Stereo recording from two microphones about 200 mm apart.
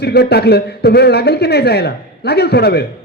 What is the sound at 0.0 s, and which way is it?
A man's voice, 55° left (ahead or behind).